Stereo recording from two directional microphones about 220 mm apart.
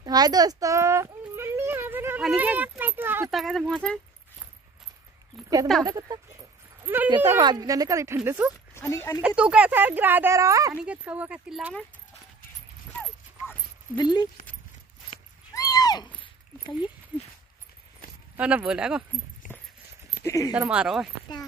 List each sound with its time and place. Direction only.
0.0 s a child's voice: 20° right (ahead or behind); by 4.0 s centre (ahead or behind)
5.9 s speech: 15° right (ahead or behind)
8.7 s speech: 10° left (ahead or behind)
9.2 s speech: 5° right (ahead or behind)
13.9 s speech: 20° left (ahead or behind)
15.5 s a sound: 15° left (ahead or behind)
17.1 s a sound: 5° right (ahead or behind)
18.3 s speech: 5° right (ahead or behind)
19.4 s a sound: 35° left (ahead or behind)
20.2 s speech: 15° left (ahead or behind)
20.5 s speech: 5° right (ahead or behind)